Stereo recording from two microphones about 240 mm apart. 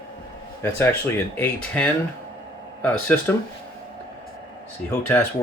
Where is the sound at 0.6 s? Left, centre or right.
Centre.